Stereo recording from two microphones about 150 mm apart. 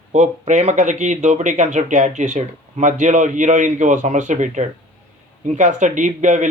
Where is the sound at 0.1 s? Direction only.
55° right (ahead or behind).